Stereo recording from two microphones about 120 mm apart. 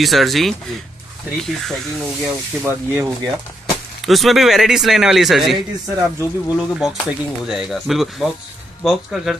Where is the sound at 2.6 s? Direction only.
20° right (ahead or behind).